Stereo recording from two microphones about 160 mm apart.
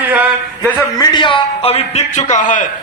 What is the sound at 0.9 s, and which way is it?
A man's voice, 30° left (ahead or behind).